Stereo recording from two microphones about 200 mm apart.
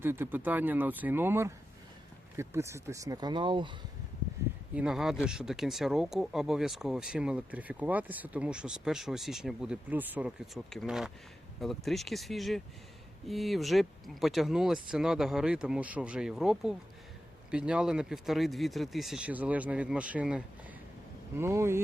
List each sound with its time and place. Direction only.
0.0 s speech: 10° right (ahead or behind)
4.7 s speech: 5° right (ahead or behind)